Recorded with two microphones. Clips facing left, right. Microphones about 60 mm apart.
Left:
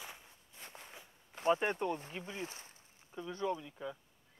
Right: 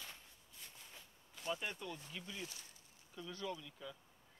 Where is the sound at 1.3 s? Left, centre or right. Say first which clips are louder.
Left 11 dB; left.